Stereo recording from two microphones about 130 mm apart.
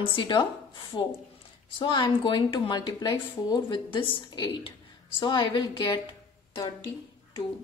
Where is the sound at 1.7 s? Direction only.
35° left (ahead or behind).